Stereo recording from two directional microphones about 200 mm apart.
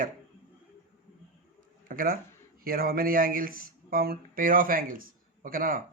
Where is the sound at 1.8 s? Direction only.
45° right (ahead or behind).